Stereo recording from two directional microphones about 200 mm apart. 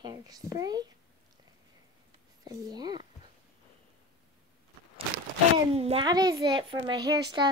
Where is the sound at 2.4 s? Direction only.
20° right (ahead or behind).